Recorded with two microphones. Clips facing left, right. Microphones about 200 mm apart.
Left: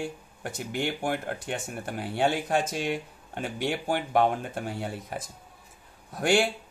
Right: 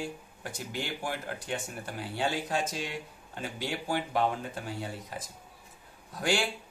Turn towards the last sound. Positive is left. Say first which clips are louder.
# left 6 dB
turn(degrees=55)  # may be behind; listen again after turning